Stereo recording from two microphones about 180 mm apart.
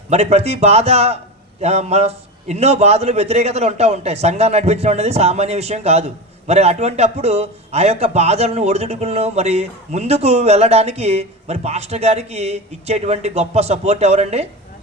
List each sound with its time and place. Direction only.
0.1 s a man's voice: 35° right (ahead or behind)